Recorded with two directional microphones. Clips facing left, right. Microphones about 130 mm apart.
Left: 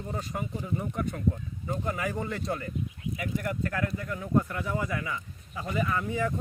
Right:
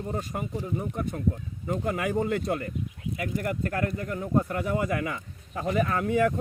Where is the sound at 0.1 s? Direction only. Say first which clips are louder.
Right 1 dB; 45° right (ahead or behind).